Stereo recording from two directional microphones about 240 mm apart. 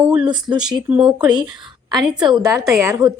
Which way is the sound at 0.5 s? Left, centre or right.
Centre.